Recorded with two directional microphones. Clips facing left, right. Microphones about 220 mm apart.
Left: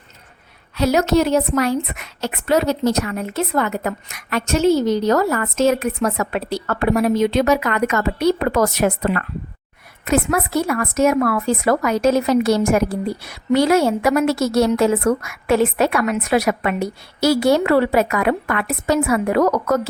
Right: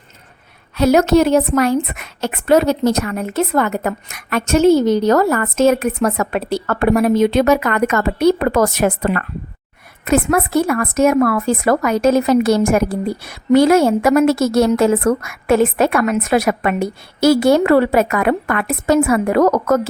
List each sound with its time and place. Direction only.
0.8 s a woman's voice: 50° right (ahead or behind)